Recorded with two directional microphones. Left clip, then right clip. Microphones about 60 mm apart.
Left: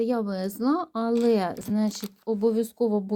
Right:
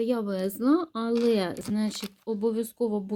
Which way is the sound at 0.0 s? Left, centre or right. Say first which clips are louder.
Left 1 dB; centre.